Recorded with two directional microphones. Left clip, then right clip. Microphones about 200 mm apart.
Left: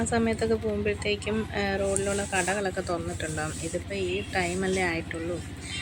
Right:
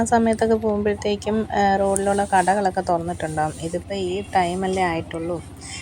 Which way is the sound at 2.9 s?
10° right (ahead or behind).